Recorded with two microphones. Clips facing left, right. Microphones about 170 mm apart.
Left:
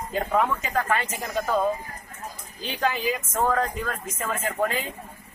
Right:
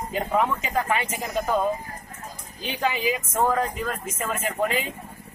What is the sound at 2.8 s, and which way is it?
Speech, 10° right (ahead or behind).